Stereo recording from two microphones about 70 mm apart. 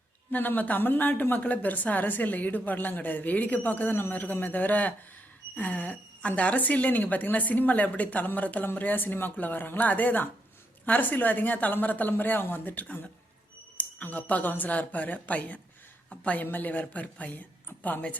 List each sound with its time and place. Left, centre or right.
0.3 s a woman's voice: left